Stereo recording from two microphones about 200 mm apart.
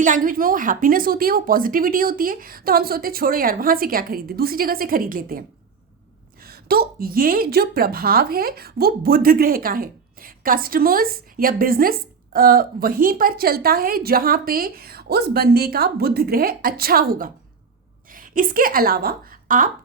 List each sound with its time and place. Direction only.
0.0 s a woman's voice: 40° right (ahead or behind)